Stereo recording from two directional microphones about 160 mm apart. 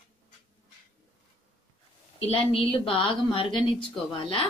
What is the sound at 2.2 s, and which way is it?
A woman's voice, 35° left (ahead or behind).